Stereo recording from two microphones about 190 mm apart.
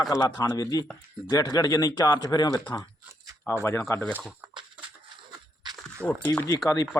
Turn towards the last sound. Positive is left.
turn(degrees=15)  # may be behind; listen again after turning